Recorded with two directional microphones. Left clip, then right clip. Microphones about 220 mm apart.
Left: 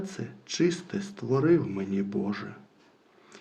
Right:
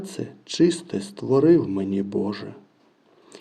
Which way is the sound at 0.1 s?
45° right (ahead or behind).